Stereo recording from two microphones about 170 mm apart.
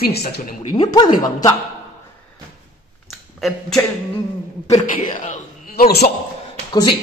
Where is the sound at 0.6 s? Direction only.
25° left (ahead or behind).